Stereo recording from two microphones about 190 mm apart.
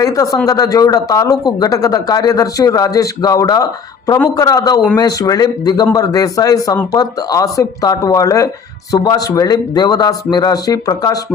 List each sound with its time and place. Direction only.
0.0 s speech: 20° left (ahead or behind)